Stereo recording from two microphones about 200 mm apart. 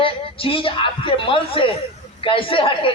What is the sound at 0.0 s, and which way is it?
A woman's voice, 25° left (ahead or behind).